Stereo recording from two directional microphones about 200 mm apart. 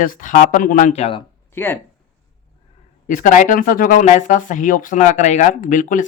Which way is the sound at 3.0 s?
40° left (ahead or behind).